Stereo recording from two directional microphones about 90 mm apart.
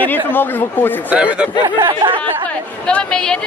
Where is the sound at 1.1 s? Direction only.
10° right (ahead or behind).